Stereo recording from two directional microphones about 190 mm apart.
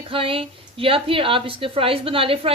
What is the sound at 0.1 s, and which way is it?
A woman's voice, 30° right (ahead or behind).